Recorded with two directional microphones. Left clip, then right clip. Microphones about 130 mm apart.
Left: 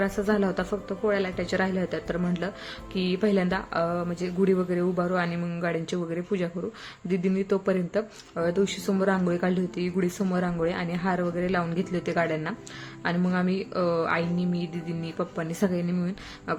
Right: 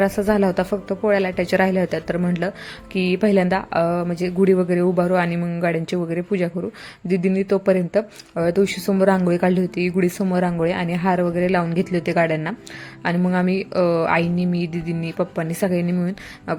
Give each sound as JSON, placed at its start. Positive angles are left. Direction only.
{"t": 0.0, "sound": "a woman's voice", "side_deg": -55}